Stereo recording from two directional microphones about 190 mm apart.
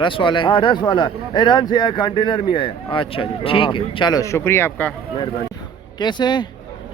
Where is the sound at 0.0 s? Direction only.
25° left (ahead or behind); by 4.9 s 10° left (ahead or behind).